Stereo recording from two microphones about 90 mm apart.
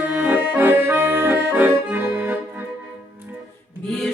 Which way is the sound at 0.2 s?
15° right (ahead or behind).